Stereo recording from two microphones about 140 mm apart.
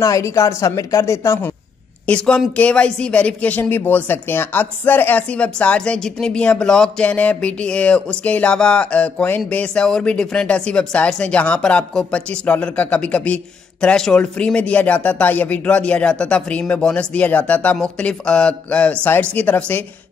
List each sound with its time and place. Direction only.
0.0 s a woman's voice: 20° left (ahead or behind)
2.0 s speech: 5° left (ahead or behind)